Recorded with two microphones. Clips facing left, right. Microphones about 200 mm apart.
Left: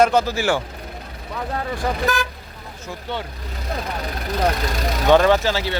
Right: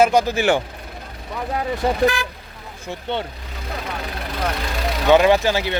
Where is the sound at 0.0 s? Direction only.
15° right (ahead or behind).